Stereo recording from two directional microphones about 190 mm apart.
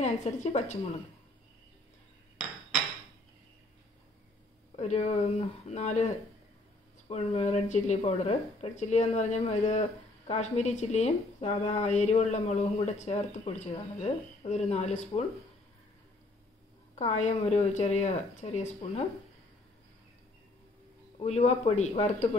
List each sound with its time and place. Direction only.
0.0 s a woman's voice: 35° left (ahead or behind)
4.7 s a woman's voice: 35° left (ahead or behind)
16.9 s a woman's voice: 40° left (ahead or behind)
21.2 s a woman's voice: 35° left (ahead or behind)